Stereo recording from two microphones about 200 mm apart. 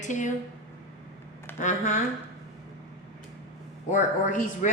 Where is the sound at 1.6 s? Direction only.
35° left (ahead or behind).